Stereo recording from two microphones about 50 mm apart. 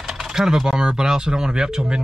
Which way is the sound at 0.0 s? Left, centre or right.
Centre.